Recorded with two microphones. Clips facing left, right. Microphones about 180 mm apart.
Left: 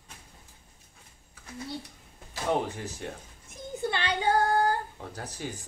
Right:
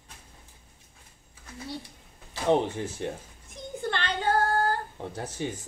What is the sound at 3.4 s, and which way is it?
Child singing, 5° left (ahead or behind).